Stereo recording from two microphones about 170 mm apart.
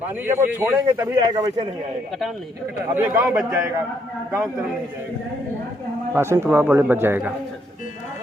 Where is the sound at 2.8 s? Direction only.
15° right (ahead or behind).